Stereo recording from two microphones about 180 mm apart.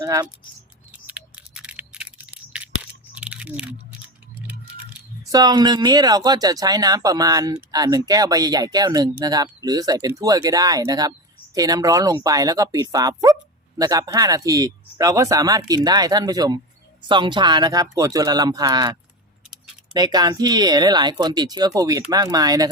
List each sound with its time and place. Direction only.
0.0 s speech: 20° right (ahead or behind)
0.9 s a sound: 5° right (ahead or behind)
5.2 s speech: 20° right (ahead or behind)
19.9 s speech: 20° right (ahead or behind)